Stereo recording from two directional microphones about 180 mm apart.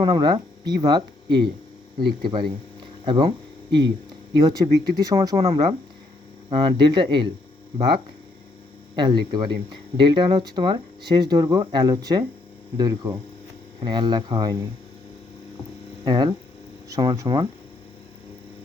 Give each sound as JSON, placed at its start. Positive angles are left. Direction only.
{"t": 0.0, "sound": "speech", "side_deg": -25}
{"t": 3.7, "sound": "speech", "side_deg": -70}
{"t": 4.4, "sound": "speech", "side_deg": -25}
{"t": 9.0, "sound": "speech", "side_deg": -25}
{"t": 16.0, "sound": "speech", "side_deg": -25}